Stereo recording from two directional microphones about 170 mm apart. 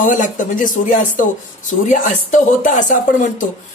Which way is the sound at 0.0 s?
50° left (ahead or behind).